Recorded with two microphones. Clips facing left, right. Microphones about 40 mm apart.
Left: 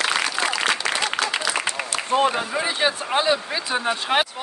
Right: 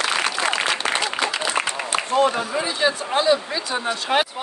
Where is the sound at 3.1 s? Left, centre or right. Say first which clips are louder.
Right 2 dB; centre.